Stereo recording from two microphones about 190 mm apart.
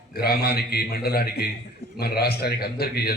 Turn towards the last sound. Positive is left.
turn(degrees=55)  # may be behind; listen again after turning